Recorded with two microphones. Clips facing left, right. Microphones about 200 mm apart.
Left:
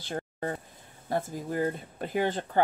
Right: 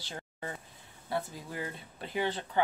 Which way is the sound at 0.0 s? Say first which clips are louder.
Left 8 dB; 50° left (ahead or behind).